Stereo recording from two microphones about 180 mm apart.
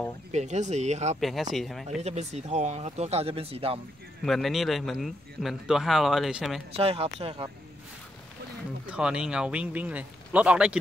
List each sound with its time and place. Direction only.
0.3 s speech: 40° right (ahead or behind)
1.2 s a man's voice: centre (ahead or behind)
1.9 s speech: 40° right (ahead or behind)
4.2 s a man's voice: centre (ahead or behind)
6.8 s speech: 35° right (ahead or behind)
8.8 s a man's voice: 5° right (ahead or behind)